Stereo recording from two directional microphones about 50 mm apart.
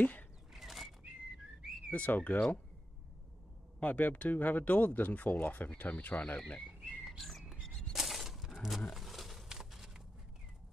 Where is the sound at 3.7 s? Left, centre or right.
Left.